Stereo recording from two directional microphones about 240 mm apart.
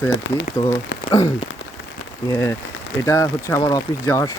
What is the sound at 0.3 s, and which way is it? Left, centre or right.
Speech, left.